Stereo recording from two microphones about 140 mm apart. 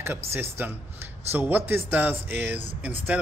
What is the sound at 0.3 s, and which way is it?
Speech, 15° right (ahead or behind).